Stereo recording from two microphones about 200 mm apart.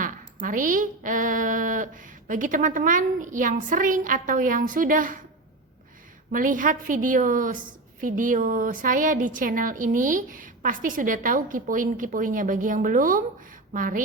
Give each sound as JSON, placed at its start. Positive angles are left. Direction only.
{"t": 0.0, "sound": "a woman's voice", "side_deg": -45}
{"t": 6.3, "sound": "a woman's voice", "side_deg": -40}